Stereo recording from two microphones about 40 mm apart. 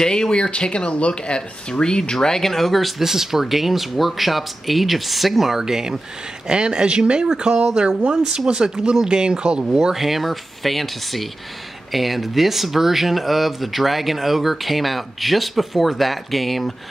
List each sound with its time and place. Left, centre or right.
0.0 s speech: centre
3.0 s speech: centre
6.5 s speech: right
9.9 s speech: centre